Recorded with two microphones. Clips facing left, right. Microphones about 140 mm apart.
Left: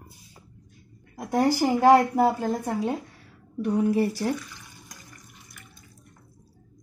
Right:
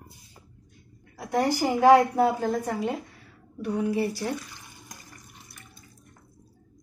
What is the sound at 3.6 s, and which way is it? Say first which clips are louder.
Speech: left 3 dB; 40° left (ahead or behind).